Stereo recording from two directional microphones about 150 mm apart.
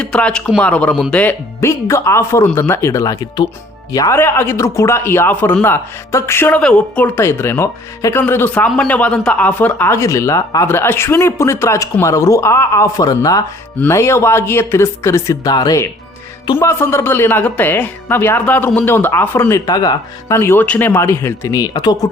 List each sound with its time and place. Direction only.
0.0 s speech: 5° left (ahead or behind); by 22.1 s 25° left (ahead or behind)